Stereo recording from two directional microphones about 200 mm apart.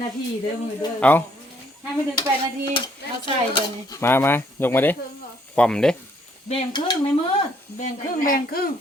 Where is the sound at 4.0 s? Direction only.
10° left (ahead or behind).